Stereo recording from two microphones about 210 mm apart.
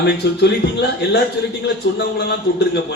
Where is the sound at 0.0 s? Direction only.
50° left (ahead or behind).